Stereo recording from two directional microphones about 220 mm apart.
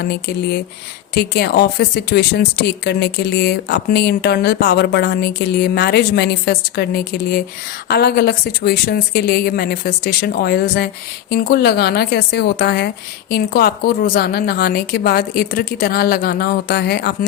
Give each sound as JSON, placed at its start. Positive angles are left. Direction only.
{"t": 0.0, "sound": "speech", "side_deg": 45}